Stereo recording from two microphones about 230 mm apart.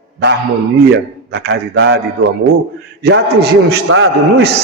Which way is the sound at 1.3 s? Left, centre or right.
Right.